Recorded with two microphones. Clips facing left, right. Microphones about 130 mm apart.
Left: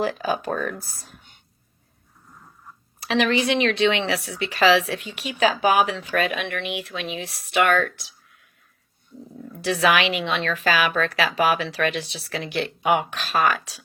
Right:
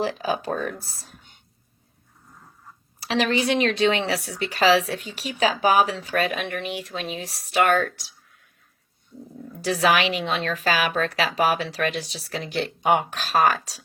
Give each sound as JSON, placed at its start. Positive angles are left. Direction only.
{"t": 0.0, "sound": "speech", "side_deg": 45}
{"t": 0.4, "sound": "speech", "side_deg": -35}
{"t": 3.1, "sound": "speech", "side_deg": -35}
{"t": 9.6, "sound": "speech", "side_deg": -40}